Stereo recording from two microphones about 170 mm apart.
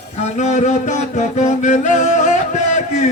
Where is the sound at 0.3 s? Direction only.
45° left (ahead or behind).